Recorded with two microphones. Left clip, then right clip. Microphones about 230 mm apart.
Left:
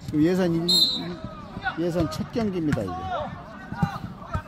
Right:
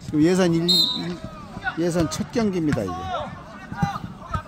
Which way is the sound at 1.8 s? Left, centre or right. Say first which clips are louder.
Right 4 dB; right.